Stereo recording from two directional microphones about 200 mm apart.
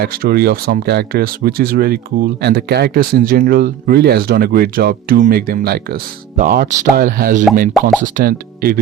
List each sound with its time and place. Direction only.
0.0 s speech: 50° right (ahead or behind)
7.7 s speech: centre (ahead or behind)
8.0 s speech: 45° right (ahead or behind)